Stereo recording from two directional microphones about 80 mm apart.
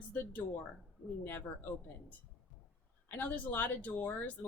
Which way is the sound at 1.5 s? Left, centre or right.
Left.